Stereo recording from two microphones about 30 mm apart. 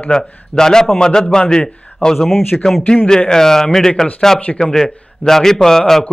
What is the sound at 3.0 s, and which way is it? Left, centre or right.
Speech, left.